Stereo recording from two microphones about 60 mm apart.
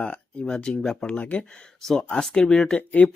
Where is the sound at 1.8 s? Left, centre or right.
Centre.